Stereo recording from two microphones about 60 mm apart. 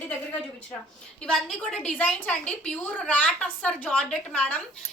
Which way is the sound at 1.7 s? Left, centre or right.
Centre.